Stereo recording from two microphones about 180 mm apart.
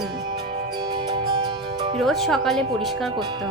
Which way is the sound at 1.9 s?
Centre (ahead or behind).